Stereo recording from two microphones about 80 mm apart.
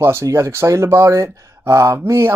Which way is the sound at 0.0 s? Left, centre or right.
Right.